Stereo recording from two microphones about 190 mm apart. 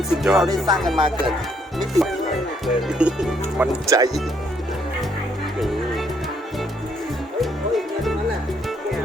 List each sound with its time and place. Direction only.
0.1 s speech: centre (ahead or behind)
0.9 s speech: 25° right (ahead or behind)
1.8 s speech: centre (ahead or behind)
3.8 s speech: 15° right (ahead or behind)
7.7 s music: centre (ahead or behind)